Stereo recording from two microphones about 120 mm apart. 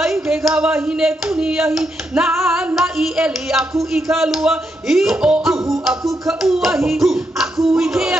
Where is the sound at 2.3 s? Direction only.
20° right (ahead or behind).